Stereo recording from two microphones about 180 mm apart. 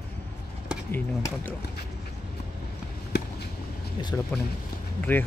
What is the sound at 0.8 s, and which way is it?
Speech, 10° left (ahead or behind).